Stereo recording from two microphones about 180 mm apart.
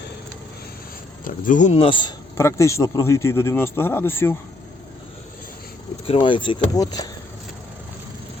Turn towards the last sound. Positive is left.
turn(degrees=20)  # may be behind; listen again after turning